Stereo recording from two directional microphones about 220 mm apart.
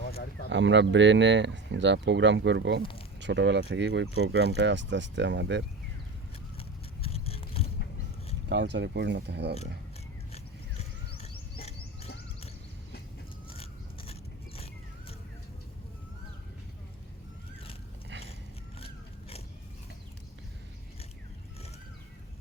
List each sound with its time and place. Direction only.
0.0 s a sound: 45° left (ahead or behind)
0.5 s speech: 55° right (ahead or behind)
6.6 s scissors: 25° left (ahead or behind)
8.4 s speech: 50° right (ahead or behind)
13.5 s biting: 25° left (ahead or behind)